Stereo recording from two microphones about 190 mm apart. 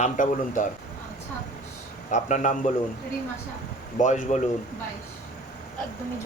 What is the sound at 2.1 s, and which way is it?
Speech, 40° left (ahead or behind).